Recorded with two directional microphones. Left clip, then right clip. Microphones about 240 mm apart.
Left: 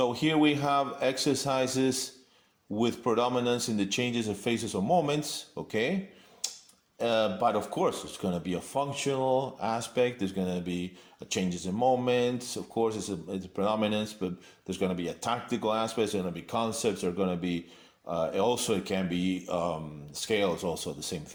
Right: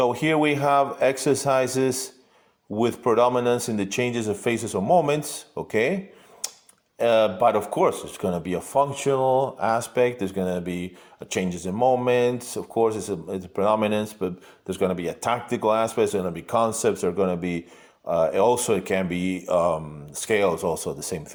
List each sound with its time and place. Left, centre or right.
0.0 s speech: centre
7.0 s speech: right